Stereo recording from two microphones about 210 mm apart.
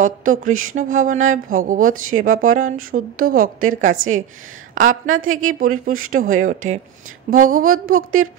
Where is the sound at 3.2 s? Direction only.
90° right.